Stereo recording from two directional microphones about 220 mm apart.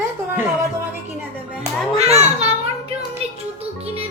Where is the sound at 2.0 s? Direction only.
30° right (ahead or behind).